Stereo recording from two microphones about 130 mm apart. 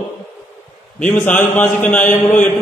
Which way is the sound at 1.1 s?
15° left (ahead or behind).